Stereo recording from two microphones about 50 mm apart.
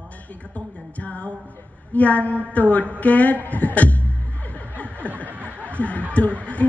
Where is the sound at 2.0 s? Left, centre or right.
Left.